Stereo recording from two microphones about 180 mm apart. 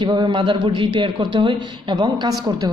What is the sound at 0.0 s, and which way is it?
A man's voice, 25° right (ahead or behind).